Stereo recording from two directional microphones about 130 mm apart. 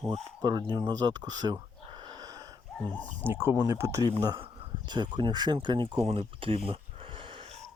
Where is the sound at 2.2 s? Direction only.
30° right (ahead or behind).